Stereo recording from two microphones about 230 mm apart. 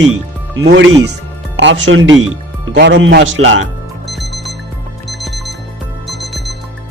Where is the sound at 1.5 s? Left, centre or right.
Right.